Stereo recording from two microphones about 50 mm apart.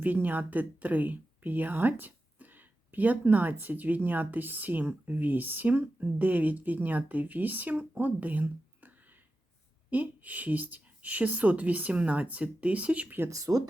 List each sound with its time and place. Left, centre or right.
0.0 s speech: right
13.5 s speech: right